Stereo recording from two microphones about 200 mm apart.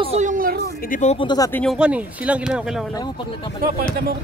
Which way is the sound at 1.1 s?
20° left (ahead or behind).